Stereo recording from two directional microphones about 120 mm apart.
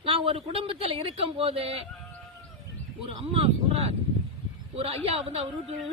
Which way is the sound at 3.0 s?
50° right (ahead or behind).